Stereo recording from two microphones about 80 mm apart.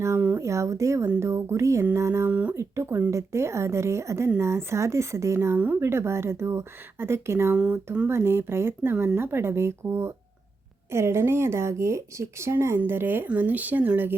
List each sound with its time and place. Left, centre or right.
0.3 s speech: right
2.2 s speech: centre
2.6 s speech: right
7.5 s speech: centre
8.0 s speech: right